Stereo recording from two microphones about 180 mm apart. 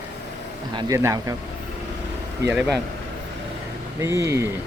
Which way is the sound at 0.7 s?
25° right (ahead or behind).